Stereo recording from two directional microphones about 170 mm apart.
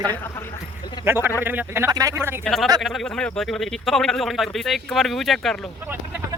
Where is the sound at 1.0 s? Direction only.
10° right (ahead or behind).